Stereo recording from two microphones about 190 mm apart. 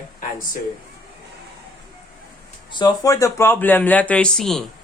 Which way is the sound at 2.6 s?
25° left (ahead or behind).